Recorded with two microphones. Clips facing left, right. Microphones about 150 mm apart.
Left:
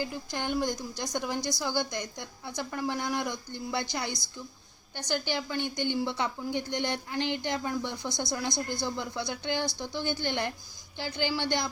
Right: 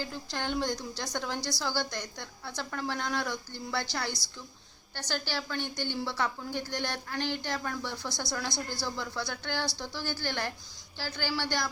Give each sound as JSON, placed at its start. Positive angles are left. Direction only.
{"t": 0.0, "sound": "a woman's voice", "side_deg": 15}